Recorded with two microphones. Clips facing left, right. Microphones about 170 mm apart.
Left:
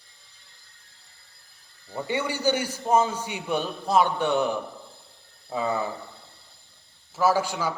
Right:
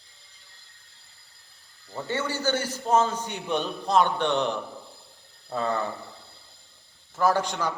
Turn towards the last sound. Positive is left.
turn(degrees=5)  # may be behind; listen again after turning